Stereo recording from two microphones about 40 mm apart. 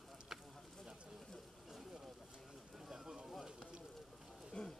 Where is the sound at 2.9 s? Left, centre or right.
Centre.